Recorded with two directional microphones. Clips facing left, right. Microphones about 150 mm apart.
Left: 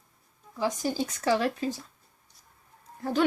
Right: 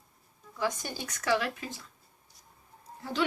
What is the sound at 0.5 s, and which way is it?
Speech, 25° left (ahead or behind).